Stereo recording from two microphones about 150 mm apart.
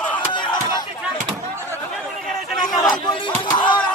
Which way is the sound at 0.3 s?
30° left (ahead or behind).